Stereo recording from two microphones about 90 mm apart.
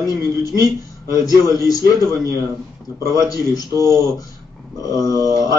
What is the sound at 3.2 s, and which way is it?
Speech, 45° left (ahead or behind).